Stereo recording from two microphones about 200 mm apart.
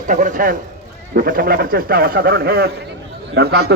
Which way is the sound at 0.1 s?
40° right (ahead or behind).